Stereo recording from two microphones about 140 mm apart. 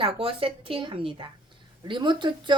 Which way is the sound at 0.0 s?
40° right (ahead or behind).